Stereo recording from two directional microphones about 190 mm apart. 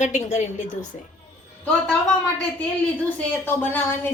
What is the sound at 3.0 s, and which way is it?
A woman's voice, 10° left (ahead or behind).